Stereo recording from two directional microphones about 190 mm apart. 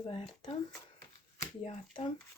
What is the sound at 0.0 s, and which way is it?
Speech, 30° left (ahead or behind).